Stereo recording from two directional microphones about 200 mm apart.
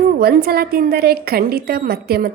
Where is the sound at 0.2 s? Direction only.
50° right (ahead or behind).